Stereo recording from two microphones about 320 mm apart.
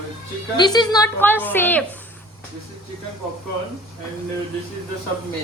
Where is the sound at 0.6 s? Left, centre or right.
Centre.